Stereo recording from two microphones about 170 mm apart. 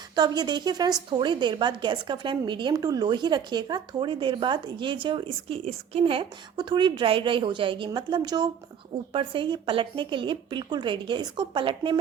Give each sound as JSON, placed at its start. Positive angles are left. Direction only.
{"t": 0.2, "sound": "a woman's voice", "side_deg": -25}